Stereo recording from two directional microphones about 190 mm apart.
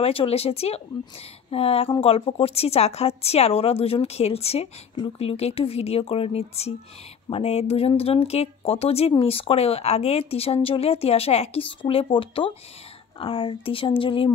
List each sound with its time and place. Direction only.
0.0 s speech: 30° left (ahead or behind)